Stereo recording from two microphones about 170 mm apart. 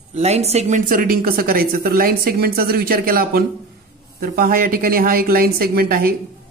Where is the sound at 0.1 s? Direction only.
40° right (ahead or behind).